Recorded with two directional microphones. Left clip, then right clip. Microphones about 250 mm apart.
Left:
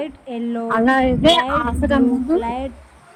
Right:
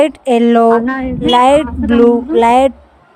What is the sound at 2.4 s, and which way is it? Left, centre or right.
Speech, right.